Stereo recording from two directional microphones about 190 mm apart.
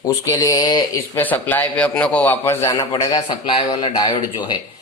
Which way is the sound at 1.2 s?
10° left (ahead or behind).